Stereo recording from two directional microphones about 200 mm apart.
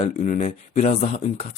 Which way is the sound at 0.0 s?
40° left (ahead or behind).